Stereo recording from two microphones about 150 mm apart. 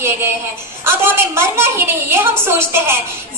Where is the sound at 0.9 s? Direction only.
15° right (ahead or behind).